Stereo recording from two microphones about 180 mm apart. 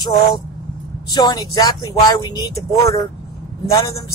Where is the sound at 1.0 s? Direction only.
20° left (ahead or behind).